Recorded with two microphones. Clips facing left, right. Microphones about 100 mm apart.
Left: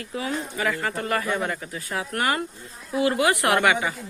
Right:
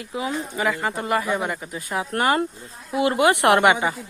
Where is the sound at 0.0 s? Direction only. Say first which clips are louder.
Right 2 dB; 20° right (ahead or behind).